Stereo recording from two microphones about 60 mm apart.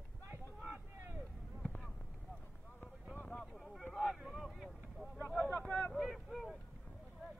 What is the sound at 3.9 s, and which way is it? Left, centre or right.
Vehicle, centre.